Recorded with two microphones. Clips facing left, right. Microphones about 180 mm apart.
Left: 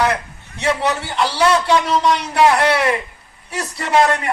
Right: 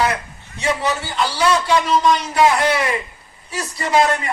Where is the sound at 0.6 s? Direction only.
65° left (ahead or behind).